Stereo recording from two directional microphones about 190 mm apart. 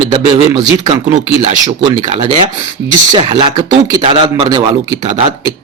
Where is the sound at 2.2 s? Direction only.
20° right (ahead or behind).